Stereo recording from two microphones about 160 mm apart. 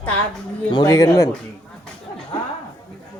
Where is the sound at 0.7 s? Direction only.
25° left (ahead or behind).